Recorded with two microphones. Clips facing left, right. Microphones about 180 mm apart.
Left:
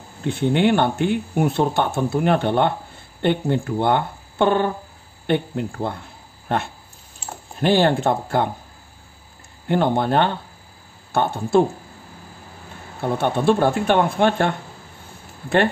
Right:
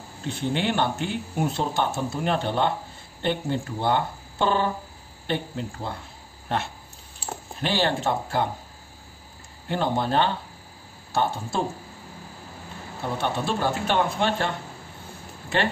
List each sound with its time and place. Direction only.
0.4 s speech: 60° left (ahead or behind)
7.6 s speech: 50° left (ahead or behind)
9.7 s speech: 55° left (ahead or behind)
13.2 s speech: 55° left (ahead or behind)